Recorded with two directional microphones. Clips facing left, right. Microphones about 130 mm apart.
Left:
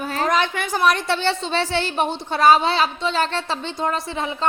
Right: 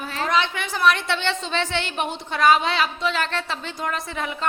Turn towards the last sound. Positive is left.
turn(degrees=30)  # may be behind; listen again after turning